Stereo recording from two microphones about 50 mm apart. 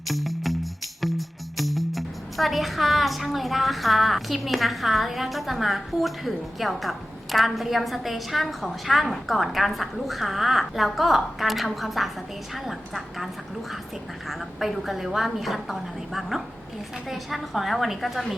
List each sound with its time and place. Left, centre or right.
0.1 s music: centre